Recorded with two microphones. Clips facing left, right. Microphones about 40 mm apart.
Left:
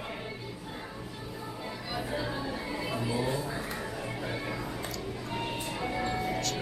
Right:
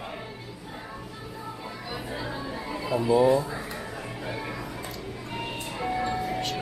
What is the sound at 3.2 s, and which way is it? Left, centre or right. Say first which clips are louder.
Speech: right 10 dB; centre.